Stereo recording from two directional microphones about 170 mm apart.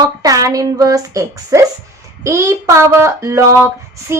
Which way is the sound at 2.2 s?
15° right (ahead or behind).